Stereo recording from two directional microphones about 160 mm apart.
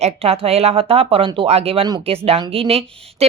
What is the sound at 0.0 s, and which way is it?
A woman's voice, 40° right (ahead or behind).